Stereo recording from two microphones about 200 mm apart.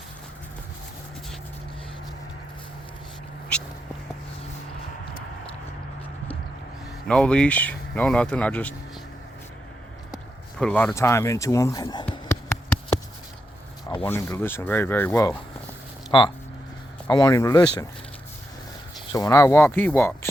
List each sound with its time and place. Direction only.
7.1 s speech: 5° left (ahead or behind)
10.6 s speech: 5° left (ahead or behind)
12.3 s a sound: 15° left (ahead or behind)
14.0 s speech: 15° left (ahead or behind)
16.1 s speech: 25° left (ahead or behind)
19.1 s speech: 15° left (ahead or behind)